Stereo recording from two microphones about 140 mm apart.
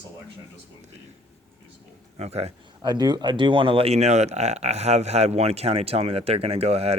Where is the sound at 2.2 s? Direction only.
50° right (ahead or behind).